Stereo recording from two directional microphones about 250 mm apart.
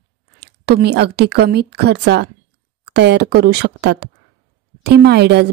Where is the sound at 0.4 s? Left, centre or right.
Right.